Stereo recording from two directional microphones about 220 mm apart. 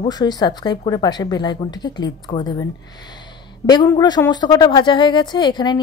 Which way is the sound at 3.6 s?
20° left (ahead or behind).